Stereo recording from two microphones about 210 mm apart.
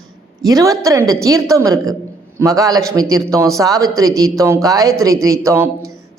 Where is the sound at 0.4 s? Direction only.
15° right (ahead or behind).